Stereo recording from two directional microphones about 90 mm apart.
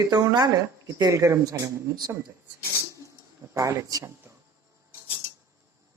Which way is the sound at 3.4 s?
20° right (ahead or behind).